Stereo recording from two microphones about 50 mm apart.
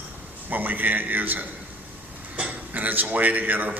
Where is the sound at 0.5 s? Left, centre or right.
Right.